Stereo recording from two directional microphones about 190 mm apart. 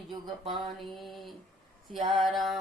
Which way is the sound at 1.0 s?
Centre (ahead or behind).